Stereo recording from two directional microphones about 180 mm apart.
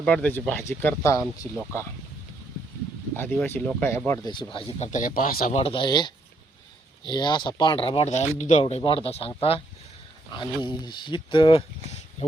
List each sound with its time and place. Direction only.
0.0 s speech: 5° left (ahead or behind)
3.2 s speech: 10° left (ahead or behind)
4.5 s a man's voice: 40° left (ahead or behind)
5.5 s speech: 30° left (ahead or behind)
10.3 s speech: 25° left (ahead or behind)